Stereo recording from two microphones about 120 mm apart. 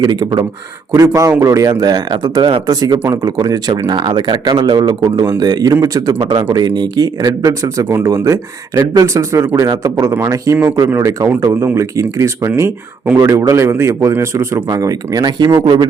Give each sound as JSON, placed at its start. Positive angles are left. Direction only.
{"t": 0.0, "sound": "speech", "side_deg": -35}
{"t": 0.9, "sound": "speech", "side_deg": -25}
{"t": 6.1, "sound": "speech", "side_deg": -45}
{"t": 6.5, "sound": "speech", "side_deg": -35}